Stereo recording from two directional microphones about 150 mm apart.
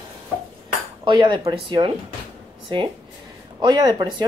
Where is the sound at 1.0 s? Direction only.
30° right (ahead or behind).